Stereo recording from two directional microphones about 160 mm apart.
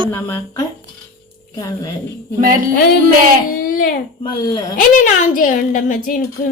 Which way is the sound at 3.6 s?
60° left (ahead or behind).